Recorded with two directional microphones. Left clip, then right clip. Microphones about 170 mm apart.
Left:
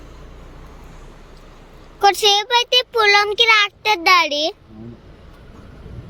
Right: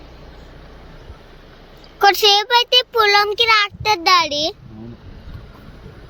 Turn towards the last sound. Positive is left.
turn(degrees=0)  # may be behind; listen again after turning